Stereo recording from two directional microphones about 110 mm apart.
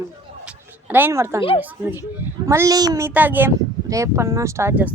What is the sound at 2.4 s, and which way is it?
Speech, 25° right (ahead or behind).